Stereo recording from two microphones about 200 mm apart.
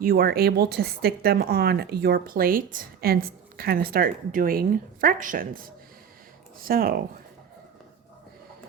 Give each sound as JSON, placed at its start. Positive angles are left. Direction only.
{"t": 0.0, "sound": "a woman's voice", "side_deg": -50}